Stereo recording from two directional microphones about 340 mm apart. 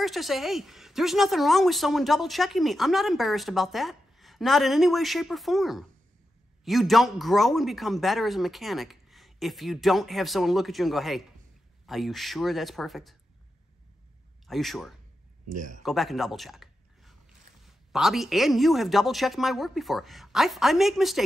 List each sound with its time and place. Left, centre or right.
0.0 s a woman's voice: centre
14.5 s a woman's voice: centre
15.5 s speech: right
15.8 s a woman's voice: centre